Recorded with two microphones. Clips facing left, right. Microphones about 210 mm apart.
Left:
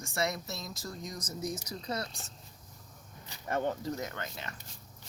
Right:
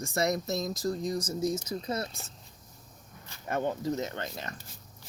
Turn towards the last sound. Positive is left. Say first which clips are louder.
# right 4 dB
turn(degrees=-40)  # may be behind; listen again after turning